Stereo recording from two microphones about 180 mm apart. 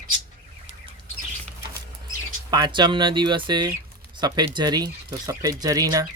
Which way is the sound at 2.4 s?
25° right (ahead or behind).